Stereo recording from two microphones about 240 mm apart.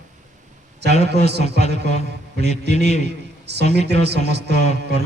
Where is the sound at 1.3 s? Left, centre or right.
Right.